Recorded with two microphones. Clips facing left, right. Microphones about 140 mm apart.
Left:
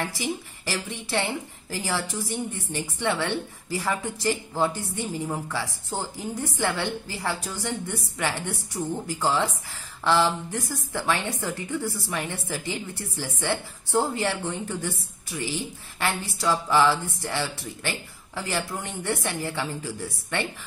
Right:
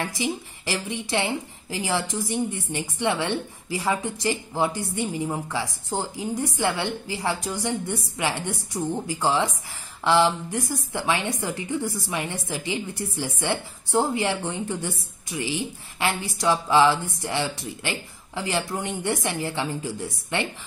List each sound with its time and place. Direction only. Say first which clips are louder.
0.0 s a woman's voice: right 2 dB; 15° right (ahead or behind)